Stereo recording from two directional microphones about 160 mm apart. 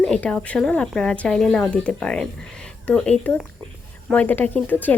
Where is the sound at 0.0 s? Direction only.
5° left (ahead or behind).